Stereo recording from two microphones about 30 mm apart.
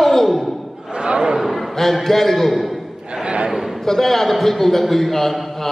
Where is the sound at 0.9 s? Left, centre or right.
Right.